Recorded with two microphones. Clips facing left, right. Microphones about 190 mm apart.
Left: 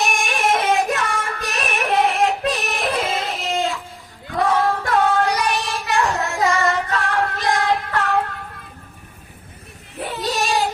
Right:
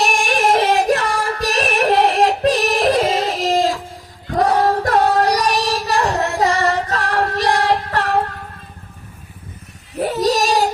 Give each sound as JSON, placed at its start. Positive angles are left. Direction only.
{"t": 0.0, "sound": "yodeling", "side_deg": -35}
{"t": 0.9, "sound": "child singing", "side_deg": -35}
{"t": 10.0, "sound": "a sound", "side_deg": -40}